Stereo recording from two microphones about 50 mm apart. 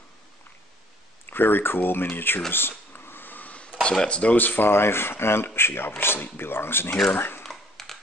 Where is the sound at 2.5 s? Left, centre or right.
Left.